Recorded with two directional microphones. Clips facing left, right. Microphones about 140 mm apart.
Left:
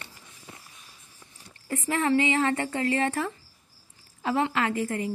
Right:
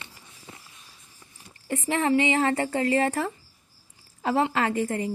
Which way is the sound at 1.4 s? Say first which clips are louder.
Right 2 dB; 15° right (ahead or behind).